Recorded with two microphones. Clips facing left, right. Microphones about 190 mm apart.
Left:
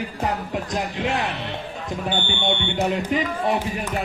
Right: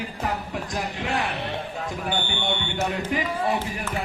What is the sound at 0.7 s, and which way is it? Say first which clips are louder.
Speech: left 3 dB; 20° left (ahead or behind).